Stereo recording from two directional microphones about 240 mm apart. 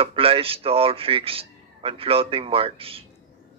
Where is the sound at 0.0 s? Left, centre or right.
Right.